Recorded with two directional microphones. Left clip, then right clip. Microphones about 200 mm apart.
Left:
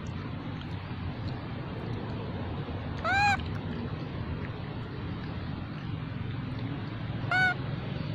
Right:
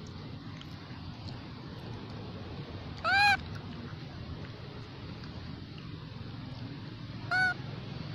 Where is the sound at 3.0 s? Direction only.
20° right (ahead or behind).